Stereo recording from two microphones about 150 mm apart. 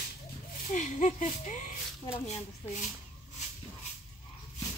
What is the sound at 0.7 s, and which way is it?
Speech, 55° left (ahead or behind).